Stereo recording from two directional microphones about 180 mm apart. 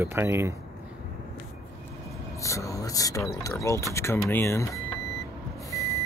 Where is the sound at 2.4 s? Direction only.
15° left (ahead or behind).